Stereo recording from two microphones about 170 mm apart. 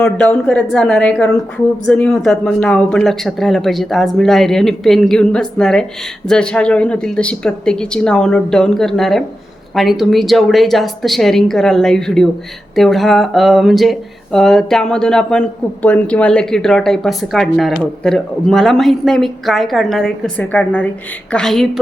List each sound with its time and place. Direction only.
0.0 s speech: 5° left (ahead or behind)